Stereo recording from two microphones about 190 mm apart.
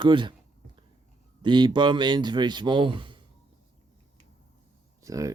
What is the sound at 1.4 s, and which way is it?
Speech, 25° right (ahead or behind).